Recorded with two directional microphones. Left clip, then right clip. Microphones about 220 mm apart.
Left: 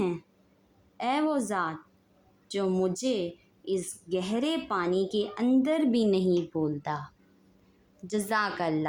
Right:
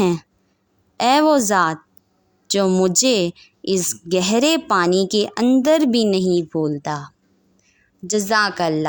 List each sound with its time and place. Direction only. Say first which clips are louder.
0.9 s a woman's voice: right 13 dB; 45° right (ahead or behind)